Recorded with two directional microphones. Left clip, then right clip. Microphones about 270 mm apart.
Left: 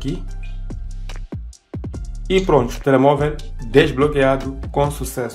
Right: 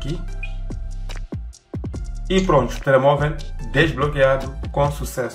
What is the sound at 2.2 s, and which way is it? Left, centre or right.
Speech, left.